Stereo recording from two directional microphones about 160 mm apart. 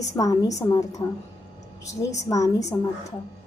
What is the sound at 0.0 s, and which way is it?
A woman's voice, 20° left (ahead or behind).